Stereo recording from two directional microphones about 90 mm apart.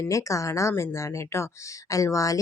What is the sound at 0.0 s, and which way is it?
Speech, 35° left (ahead or behind).